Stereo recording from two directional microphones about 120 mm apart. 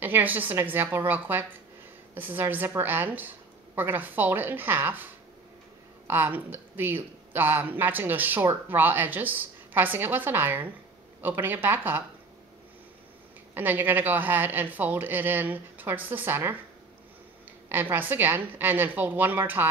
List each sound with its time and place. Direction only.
0.0 s speech: 15° right (ahead or behind)
13.6 s speech: 15° right (ahead or behind)
17.9 s speech: 15° right (ahead or behind)